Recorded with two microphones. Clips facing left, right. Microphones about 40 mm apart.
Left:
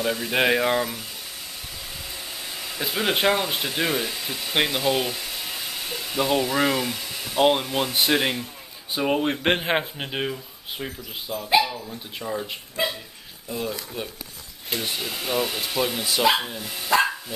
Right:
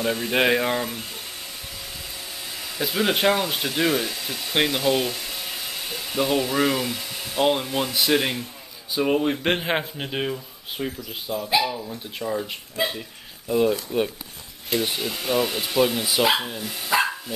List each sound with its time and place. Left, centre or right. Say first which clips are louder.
0.1 s speech: right 1 dB; centre
2.5 s speech: right 2 dB; centre
7.3 s speech: left 2 dB; centre
13.5 s speech: right 9 dB; centre
14.7 s speech: right 3 dB; centre